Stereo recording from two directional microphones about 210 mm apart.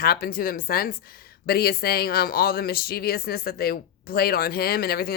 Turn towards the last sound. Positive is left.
turn(degrees=45)  # may be behind; listen again after turning